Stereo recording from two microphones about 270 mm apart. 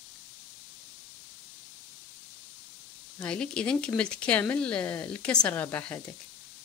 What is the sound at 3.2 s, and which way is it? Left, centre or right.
Speech, centre.